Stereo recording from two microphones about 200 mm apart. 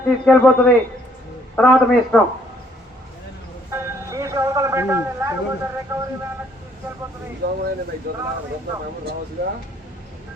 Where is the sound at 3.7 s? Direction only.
15° right (ahead or behind).